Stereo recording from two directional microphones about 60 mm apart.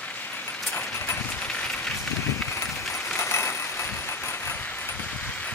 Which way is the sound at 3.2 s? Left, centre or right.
Left.